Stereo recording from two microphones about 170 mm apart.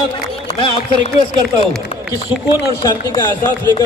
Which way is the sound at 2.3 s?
25° left (ahead or behind).